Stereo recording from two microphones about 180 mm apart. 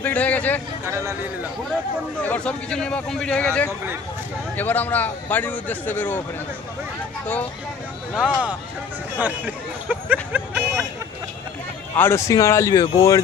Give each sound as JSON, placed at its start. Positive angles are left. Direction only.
{"t": 0.0, "sound": "a man's voice", "side_deg": 10}
{"t": 0.9, "sound": "speech", "side_deg": -15}
{"t": 2.2, "sound": "a man's voice", "side_deg": 5}
{"t": 8.1, "sound": "speech", "side_deg": -5}
{"t": 9.9, "sound": "a sound", "side_deg": -10}
{"t": 11.9, "sound": "a man's voice", "side_deg": 15}